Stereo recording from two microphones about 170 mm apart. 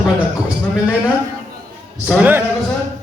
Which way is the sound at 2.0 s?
10° right (ahead or behind).